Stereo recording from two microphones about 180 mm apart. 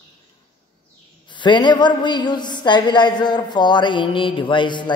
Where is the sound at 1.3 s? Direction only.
25° left (ahead or behind).